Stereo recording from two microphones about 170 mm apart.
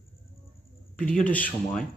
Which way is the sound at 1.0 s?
5° left (ahead or behind).